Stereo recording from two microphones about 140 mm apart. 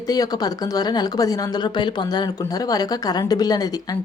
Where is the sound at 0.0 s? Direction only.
25° left (ahead or behind).